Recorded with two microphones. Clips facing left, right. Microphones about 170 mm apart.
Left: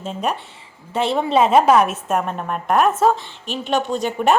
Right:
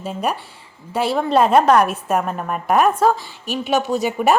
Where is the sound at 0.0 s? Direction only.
Centre (ahead or behind).